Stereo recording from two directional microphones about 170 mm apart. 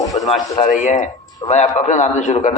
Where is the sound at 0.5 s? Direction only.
45° left (ahead or behind).